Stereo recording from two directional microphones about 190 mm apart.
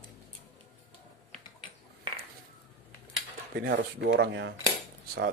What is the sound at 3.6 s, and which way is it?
Speech, 55° right (ahead or behind).